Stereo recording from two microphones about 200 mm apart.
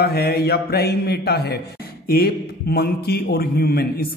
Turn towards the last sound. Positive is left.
turn(degrees=50)  # may be behind; listen again after turning